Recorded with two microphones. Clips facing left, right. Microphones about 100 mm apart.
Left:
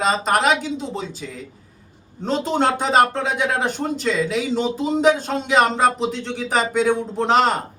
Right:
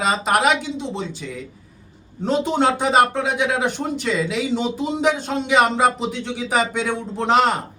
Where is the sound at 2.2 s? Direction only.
5° right (ahead or behind).